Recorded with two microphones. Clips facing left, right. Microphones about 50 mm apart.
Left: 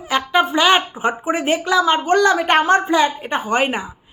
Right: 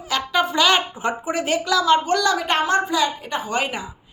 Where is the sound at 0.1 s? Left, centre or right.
Left.